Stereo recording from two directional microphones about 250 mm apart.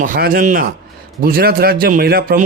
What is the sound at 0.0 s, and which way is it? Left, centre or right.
A man's voice, right.